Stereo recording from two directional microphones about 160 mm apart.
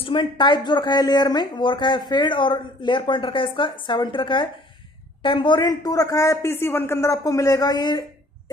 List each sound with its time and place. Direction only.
0.0 s a woman's voice: 30° left (ahead or behind)